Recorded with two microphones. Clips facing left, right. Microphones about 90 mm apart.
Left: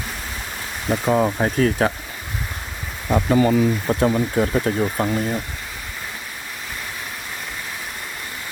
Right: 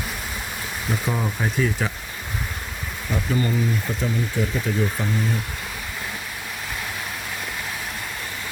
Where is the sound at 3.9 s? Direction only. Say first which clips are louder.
Left 7 dB; 65° left (ahead or behind).